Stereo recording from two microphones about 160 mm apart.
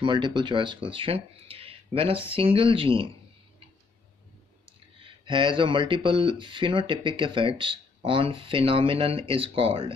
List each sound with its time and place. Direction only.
0.0 s speech: 30° right (ahead or behind)
5.2 s speech: 30° right (ahead or behind)